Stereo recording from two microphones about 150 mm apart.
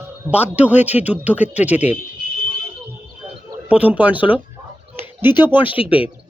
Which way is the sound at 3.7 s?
10° right (ahead or behind).